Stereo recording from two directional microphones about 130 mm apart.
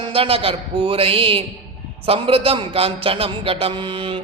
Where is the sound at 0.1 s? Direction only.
45° right (ahead or behind).